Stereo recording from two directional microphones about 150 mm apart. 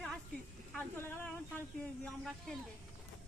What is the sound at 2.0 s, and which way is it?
Speech, centre (ahead or behind).